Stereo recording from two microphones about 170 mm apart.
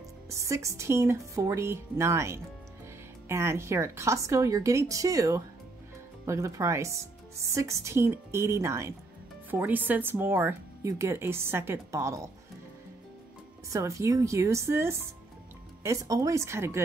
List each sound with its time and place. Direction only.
0.3 s speech: 15° right (ahead or behind)
13.7 s speech: 20° right (ahead or behind)